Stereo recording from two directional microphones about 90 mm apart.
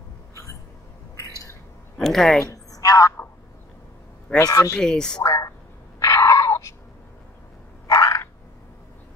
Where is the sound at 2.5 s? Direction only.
40° left (ahead or behind).